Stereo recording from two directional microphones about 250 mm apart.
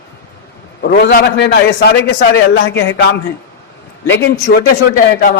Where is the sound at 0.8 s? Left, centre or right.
Left.